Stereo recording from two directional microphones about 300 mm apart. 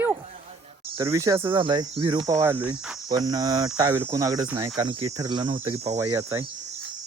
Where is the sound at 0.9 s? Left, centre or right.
Centre.